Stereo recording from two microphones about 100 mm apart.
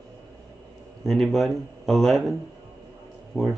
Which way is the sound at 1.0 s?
Centre (ahead or behind).